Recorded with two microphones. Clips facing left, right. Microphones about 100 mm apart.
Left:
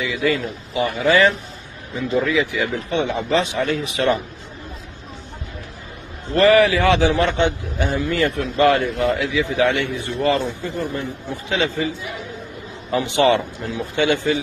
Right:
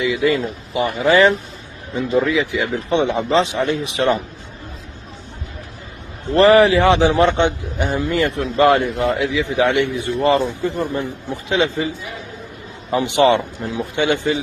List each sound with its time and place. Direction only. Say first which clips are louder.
0.1 s a man's voice: right 3 dB; 25° right (ahead or behind)
6.3 s a man's voice: right 3 dB; 25° right (ahead or behind)
12.9 s a man's voice: right 2 dB; 20° right (ahead or behind)